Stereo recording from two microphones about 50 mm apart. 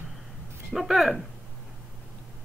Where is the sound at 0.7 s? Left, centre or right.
Centre.